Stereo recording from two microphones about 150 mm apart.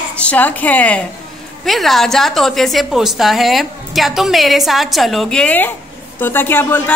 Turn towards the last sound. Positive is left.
turn(degrees=15)  # may be behind; listen again after turning